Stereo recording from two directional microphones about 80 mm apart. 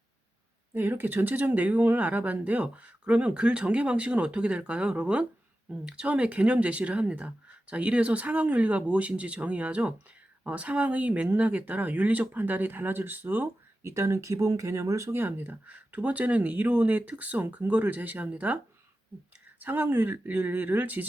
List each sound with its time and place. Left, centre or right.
0.7 s speech: right
13.8 s speech: right; by 18.6 s centre
19.6 s speech: right